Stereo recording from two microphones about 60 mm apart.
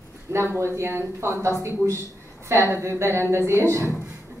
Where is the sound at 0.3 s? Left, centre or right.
Right.